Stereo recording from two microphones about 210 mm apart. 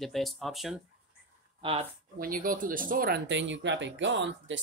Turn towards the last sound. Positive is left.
turn(degrees=-60)  # may be behind; listen again after turning